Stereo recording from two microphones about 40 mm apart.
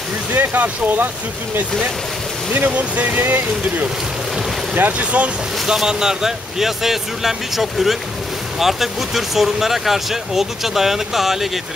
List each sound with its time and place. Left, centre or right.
0.4 s speech: right
2.5 s speech: right
3.2 s speech: right
4.7 s speech: right
5.7 s speech: centre